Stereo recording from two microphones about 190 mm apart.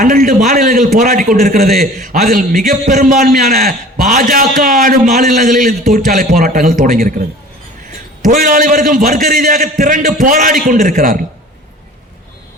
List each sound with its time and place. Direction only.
0.0 s a man's voice: 45° right (ahead or behind)
8.3 s a man's voice: 45° right (ahead or behind)